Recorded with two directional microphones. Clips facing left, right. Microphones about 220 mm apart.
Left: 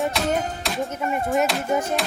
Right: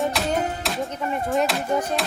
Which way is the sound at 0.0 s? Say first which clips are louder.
Even; centre (ahead or behind).